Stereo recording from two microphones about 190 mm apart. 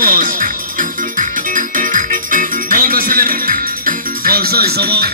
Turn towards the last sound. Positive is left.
turn(degrees=-55)  # may be behind; listen again after turning